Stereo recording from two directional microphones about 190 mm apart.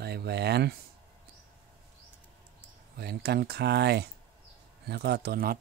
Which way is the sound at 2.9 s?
60° right (ahead or behind).